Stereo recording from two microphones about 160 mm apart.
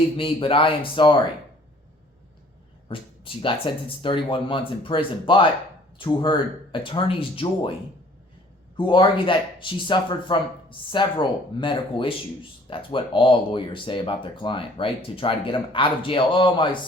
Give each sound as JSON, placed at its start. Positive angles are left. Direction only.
{"t": 0.2, "sound": "speech", "side_deg": 35}
{"t": 2.9, "sound": "speech", "side_deg": 35}
{"t": 8.7, "sound": "speech", "side_deg": 30}